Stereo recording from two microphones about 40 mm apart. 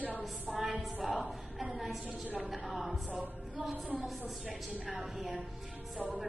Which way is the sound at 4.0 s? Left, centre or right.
Centre.